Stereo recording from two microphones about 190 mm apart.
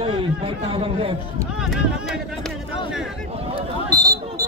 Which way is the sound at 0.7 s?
30° right (ahead or behind).